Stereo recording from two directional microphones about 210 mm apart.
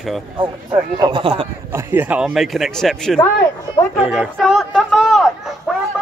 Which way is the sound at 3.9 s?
Centre (ahead or behind).